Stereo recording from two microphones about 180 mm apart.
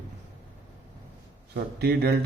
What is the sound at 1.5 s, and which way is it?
Speech, 65° right (ahead or behind).